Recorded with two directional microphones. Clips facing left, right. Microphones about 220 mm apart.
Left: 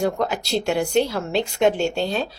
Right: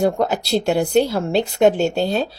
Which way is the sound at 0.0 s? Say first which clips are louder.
Right 4 dB; 35° right (ahead or behind).